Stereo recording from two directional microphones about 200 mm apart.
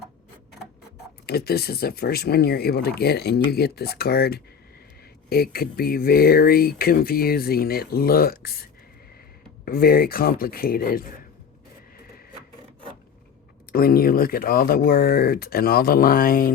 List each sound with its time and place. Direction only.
1.3 s speech: 50° left (ahead or behind)
9.6 s speech: 50° left (ahead or behind)
13.7 s speech: 50° left (ahead or behind)